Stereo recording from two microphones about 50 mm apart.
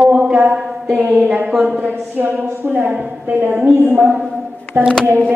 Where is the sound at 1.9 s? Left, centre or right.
Right.